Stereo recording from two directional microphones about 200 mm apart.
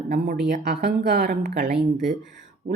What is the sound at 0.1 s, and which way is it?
A woman's voice, 55° right (ahead or behind).